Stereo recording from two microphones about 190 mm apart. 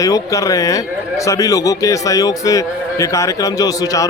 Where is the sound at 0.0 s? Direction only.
15° left (ahead or behind).